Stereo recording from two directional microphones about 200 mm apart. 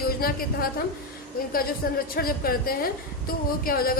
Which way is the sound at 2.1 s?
45° left (ahead or behind).